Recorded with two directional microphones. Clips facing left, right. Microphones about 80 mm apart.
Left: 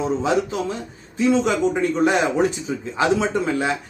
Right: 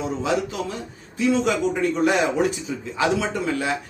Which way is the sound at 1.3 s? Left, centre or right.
Left.